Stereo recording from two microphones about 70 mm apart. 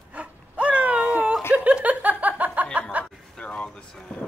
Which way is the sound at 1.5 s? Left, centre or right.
Centre.